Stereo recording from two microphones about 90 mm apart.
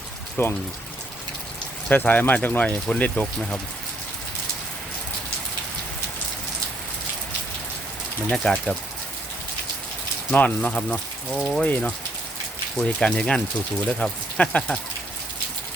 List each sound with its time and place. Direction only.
0.4 s speech: 25° left (ahead or behind)
1.9 s speech: 20° left (ahead or behind)
8.3 s speech: 5° left (ahead or behind)
10.3 s speech: 15° left (ahead or behind)
12.8 s speech: 10° left (ahead or behind)